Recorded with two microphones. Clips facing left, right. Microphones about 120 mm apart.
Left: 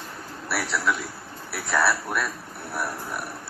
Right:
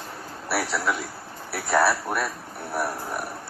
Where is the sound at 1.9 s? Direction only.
30° right (ahead or behind).